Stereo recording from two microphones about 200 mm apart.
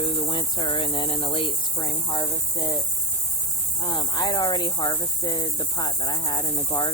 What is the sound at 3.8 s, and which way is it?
Cricket, 20° left (ahead or behind).